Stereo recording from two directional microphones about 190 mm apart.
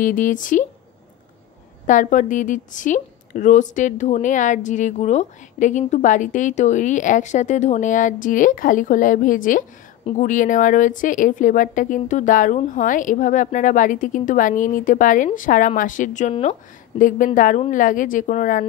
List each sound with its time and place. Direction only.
0.0 s a woman's voice: 45° left (ahead or behind)
1.9 s a woman's voice: 40° left (ahead or behind)